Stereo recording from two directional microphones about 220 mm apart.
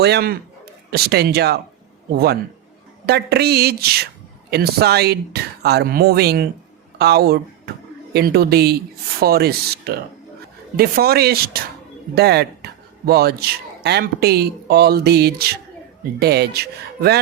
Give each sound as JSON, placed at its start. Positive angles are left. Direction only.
{"t": 0.0, "sound": "a man's voice", "side_deg": -45}